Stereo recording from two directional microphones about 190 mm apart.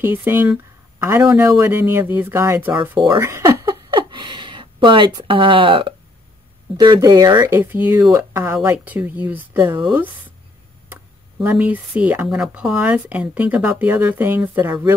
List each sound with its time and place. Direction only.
0.0 s speech: 10° right (ahead or behind)
3.1 s a sound: 15° right (ahead or behind)
6.8 s speech: 20° right (ahead or behind)
10.9 s speech: 10° right (ahead or behind)